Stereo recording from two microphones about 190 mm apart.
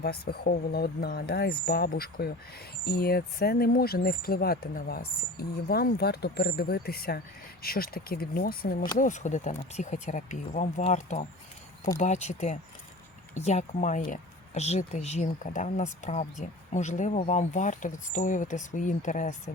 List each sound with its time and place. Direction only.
0.0 s speech: 55° left (ahead or behind)
9.0 s speech: 40° left (ahead or behind)